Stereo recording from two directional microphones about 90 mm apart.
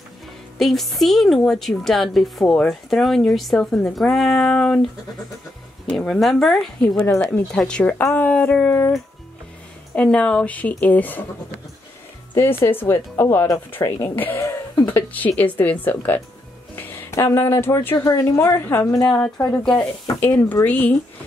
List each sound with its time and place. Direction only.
0.6 s speech: centre (ahead or behind)
2.4 s a woman's voice: 15° left (ahead or behind)
2.7 s speech: centre (ahead or behind)
5.9 s a woman's voice: 5° left (ahead or behind)
8.0 s a woman's voice: 20° left (ahead or behind)
9.9 s a woman's voice: 10° left (ahead or behind)
12.4 s a woman's voice: 25° left (ahead or behind)